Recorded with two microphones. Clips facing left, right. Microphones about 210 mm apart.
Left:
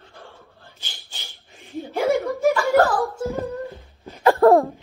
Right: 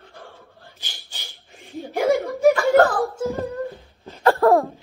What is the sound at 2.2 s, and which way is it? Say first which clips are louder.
Laughter: right 3 dB; 55° right (ahead or behind).